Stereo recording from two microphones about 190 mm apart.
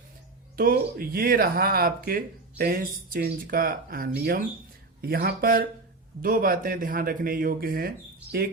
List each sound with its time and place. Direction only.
0.5 s speech: 50° right (ahead or behind)